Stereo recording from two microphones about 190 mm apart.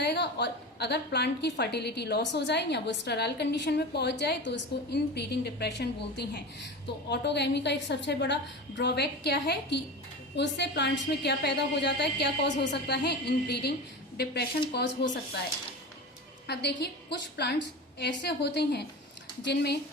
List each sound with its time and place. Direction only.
0.0 s a woman's voice: 60° left (ahead or behind)
16.5 s a woman's voice: 60° left (ahead or behind)